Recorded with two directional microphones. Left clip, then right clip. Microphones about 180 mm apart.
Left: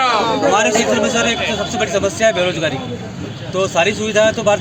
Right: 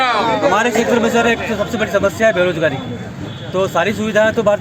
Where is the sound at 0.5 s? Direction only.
60° right (ahead or behind).